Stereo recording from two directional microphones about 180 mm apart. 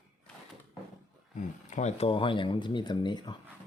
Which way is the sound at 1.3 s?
40° left (ahead or behind).